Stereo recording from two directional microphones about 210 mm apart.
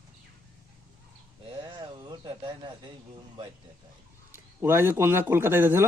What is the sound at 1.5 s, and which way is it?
Speech, 20° right (ahead or behind).